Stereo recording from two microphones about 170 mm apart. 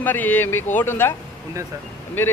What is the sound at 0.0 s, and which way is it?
Speech, 10° left (ahead or behind).